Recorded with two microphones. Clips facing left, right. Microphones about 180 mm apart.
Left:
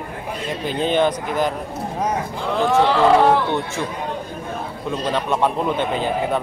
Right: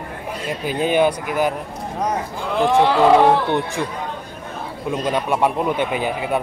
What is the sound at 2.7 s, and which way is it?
Speech, 15° right (ahead or behind).